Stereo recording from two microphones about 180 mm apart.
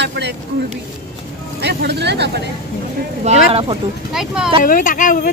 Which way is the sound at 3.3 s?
40° right (ahead or behind).